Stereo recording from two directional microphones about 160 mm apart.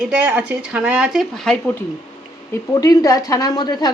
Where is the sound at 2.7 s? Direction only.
20° left (ahead or behind).